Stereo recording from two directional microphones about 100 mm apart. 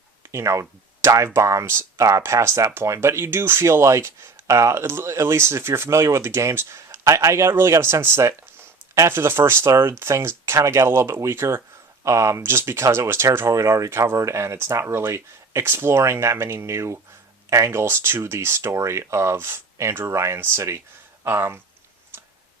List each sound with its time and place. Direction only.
0.2 s speech: 30° right (ahead or behind)